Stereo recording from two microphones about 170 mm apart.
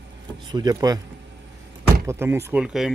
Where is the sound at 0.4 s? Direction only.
25° right (ahead or behind).